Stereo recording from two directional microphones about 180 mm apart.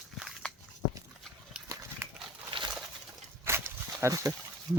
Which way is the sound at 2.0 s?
15° right (ahead or behind).